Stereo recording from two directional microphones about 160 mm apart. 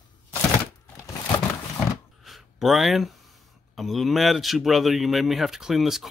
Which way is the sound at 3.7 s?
Centre (ahead or behind).